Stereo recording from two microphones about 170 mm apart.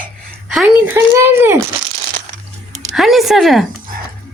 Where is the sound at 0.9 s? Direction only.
15° right (ahead or behind).